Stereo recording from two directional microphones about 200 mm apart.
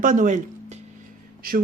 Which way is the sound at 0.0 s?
40° right (ahead or behind).